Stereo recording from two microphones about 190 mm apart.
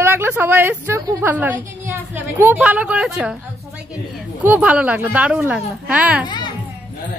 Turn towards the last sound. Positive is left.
turn(degrees=25)  # may be behind; listen again after turning